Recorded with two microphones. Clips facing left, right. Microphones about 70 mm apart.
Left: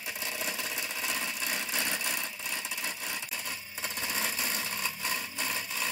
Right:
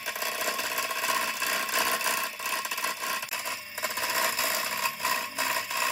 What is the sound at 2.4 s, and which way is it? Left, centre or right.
Vehicle, right.